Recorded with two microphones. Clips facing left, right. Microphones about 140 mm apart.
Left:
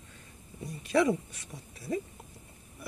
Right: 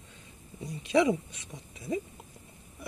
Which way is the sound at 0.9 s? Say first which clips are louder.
Right 1 dB; 20° right (ahead or behind).